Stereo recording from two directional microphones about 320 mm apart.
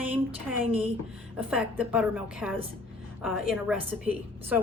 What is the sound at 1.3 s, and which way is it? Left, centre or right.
A woman's voice, centre.